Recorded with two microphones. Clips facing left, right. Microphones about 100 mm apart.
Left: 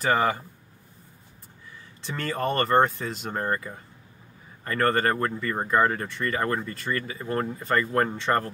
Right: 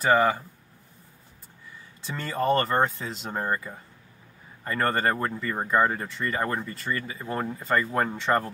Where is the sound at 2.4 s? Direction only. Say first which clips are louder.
Left 1 dB; 5° right (ahead or behind).